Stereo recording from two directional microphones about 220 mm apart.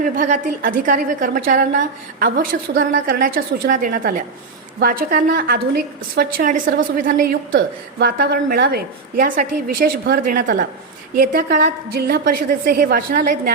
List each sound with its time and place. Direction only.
0.0 s a woman's voice: 35° right (ahead or behind)
7.5 s a woman's voice: 50° right (ahead or behind)